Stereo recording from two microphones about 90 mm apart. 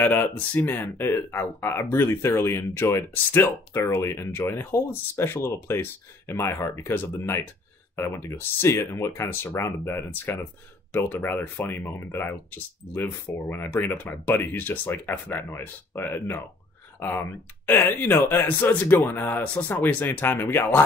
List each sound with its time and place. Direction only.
0.0 s speech: 20° left (ahead or behind)